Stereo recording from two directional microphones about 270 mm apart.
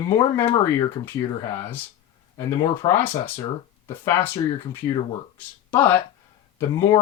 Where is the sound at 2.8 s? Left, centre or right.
Centre.